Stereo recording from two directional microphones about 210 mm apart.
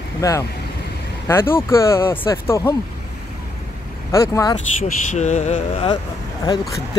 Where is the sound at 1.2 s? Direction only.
10° left (ahead or behind).